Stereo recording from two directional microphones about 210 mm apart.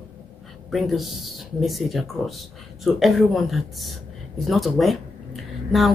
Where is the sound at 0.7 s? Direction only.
Centre (ahead or behind).